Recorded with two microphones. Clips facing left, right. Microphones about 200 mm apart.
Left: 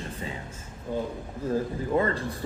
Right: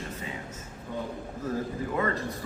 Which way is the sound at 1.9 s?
30° left (ahead or behind).